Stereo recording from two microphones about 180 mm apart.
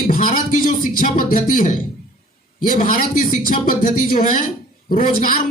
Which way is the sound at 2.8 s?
50° left (ahead or behind).